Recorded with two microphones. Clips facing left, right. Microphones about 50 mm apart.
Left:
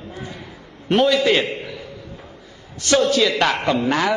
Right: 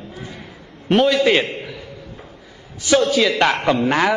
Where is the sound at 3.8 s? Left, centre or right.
Right.